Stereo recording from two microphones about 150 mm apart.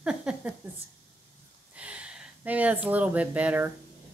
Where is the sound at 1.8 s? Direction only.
10° right (ahead or behind).